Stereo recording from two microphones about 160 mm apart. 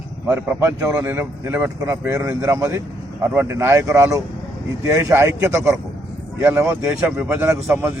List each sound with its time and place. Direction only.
0.3 s speech: 15° right (ahead or behind)